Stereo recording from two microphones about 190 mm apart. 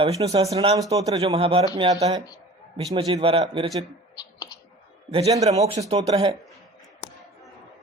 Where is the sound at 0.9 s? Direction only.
20° right (ahead or behind).